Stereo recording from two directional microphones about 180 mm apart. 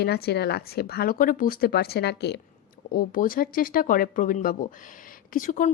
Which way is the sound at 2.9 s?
50° left (ahead or behind).